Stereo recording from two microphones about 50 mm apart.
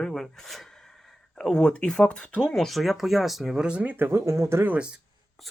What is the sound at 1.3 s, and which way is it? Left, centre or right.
Speech, centre.